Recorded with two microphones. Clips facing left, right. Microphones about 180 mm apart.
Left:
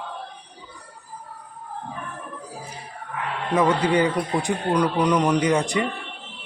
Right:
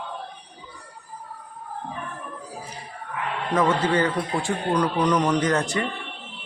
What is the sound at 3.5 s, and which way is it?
Speech, 15° left (ahead or behind).